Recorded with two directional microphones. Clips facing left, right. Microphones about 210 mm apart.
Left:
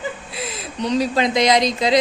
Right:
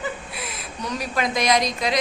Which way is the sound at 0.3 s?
25° left (ahead or behind).